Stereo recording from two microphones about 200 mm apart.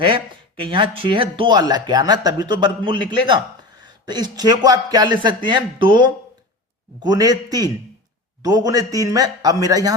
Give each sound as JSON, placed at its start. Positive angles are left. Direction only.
{"t": 0.0, "sound": "speech", "side_deg": -25}